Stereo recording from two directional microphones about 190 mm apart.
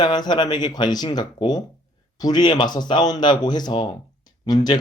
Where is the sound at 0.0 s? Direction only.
20° left (ahead or behind).